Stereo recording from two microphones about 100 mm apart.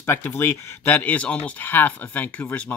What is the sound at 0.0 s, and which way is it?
Speech, 25° left (ahead or behind).